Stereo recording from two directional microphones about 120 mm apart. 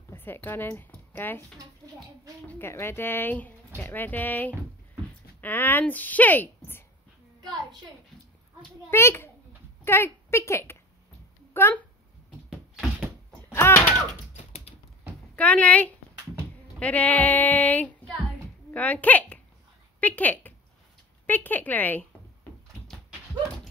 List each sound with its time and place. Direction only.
0.1 s speech: 15° left (ahead or behind)
2.4 s speech: 20° left (ahead or behind)
8.9 s a child's voice: 20° left (ahead or behind)
12.4 s a sound: 5° right (ahead or behind)
13.5 s a sound: 20° left (ahead or behind)
14.3 s typing: 65° left (ahead or behind)
15.3 s a woman's voice: 10° left (ahead or behind)